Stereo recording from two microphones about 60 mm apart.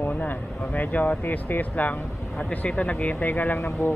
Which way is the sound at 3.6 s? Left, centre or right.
Left.